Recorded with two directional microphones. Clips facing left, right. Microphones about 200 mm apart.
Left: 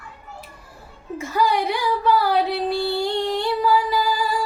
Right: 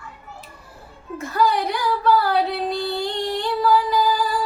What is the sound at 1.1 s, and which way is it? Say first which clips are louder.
A woman's voice: even; 10° left (ahead or behind).